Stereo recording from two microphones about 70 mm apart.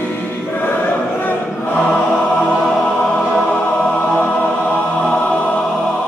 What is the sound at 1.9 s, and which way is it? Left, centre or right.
Choir, centre.